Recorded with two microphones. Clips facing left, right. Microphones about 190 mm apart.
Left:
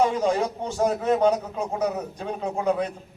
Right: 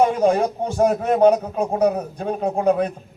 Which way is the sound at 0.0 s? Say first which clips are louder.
Right 5 dB; 55° right (ahead or behind).